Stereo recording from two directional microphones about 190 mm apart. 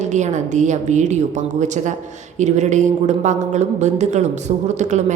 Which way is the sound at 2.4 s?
40° right (ahead or behind).